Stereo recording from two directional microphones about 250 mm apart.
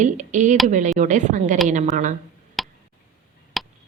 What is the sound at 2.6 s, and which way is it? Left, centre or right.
Tick, centre.